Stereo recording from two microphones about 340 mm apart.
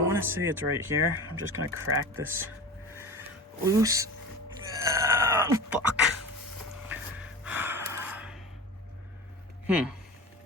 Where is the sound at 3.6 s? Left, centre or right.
Centre.